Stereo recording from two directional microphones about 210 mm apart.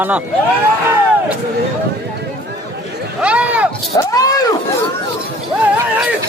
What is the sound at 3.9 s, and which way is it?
Speech, 15° left (ahead or behind).